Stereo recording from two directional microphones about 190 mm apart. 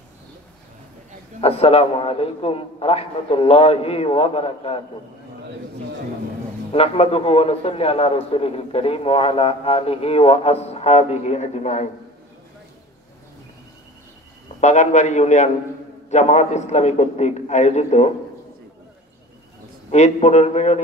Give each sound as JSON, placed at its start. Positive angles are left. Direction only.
{"t": 1.4, "sound": "a man's voice", "side_deg": 30}
{"t": 6.7, "sound": "a man's voice", "side_deg": 30}
{"t": 14.6, "sound": "a man's voice", "side_deg": 35}
{"t": 19.9, "sound": "a man's voice", "side_deg": 35}